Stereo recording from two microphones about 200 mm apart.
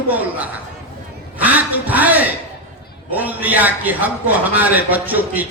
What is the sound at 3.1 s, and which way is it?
Speech, 10° right (ahead or behind).